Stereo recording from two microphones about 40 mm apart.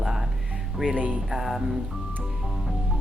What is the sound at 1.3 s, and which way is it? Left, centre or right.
Speech, centre.